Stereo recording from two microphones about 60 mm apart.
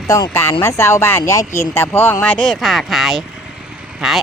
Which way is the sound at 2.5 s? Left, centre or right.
Centre.